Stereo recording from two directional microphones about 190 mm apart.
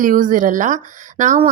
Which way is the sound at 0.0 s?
45° right (ahead or behind).